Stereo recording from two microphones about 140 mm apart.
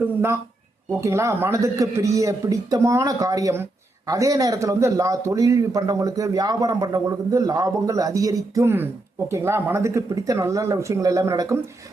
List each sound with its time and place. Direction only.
0.9 s a man's voice: 20° right (ahead or behind)